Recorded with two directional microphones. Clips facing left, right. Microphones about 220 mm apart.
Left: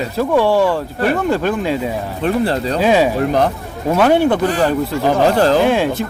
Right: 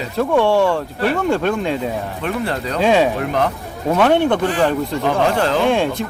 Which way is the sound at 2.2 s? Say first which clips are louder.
Left 8 dB; 35° left (ahead or behind).